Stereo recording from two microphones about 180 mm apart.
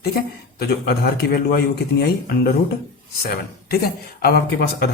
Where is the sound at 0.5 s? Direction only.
60° left (ahead or behind).